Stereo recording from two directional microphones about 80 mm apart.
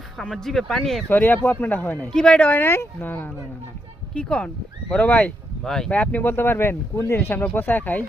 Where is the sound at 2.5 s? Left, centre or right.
Left.